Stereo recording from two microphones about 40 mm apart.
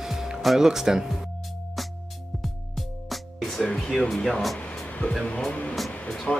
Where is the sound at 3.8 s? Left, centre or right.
Centre.